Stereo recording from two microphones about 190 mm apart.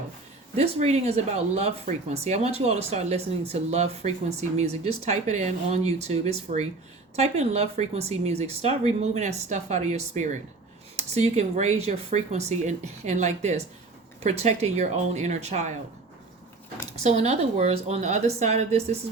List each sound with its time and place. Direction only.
0.5 s speech: 35° right (ahead or behind)
17.0 s speech: 35° right (ahead or behind)